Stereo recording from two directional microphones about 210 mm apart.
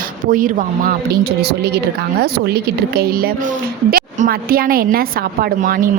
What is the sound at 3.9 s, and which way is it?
A child's voice, 45° right (ahead or behind).